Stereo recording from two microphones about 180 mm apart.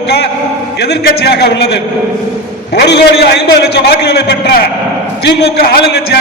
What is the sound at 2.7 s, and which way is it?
A man's voice, 65° left (ahead or behind).